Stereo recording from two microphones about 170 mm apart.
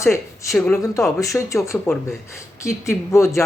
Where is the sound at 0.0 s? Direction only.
15° left (ahead or behind).